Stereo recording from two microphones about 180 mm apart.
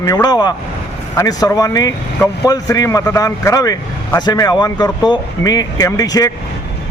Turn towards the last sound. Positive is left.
turn(degrees=20)  # may be behind; listen again after turning